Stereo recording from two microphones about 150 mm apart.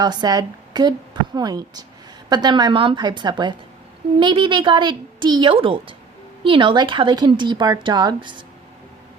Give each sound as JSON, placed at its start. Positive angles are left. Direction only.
{"t": 0.0, "sound": "a woman's voice", "side_deg": -25}